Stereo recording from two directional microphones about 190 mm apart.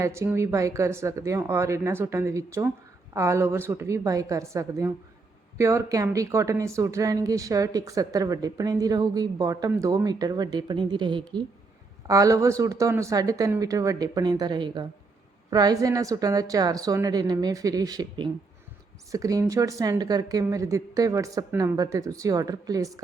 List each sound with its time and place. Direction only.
0.0 s a woman's voice: 15° right (ahead or behind)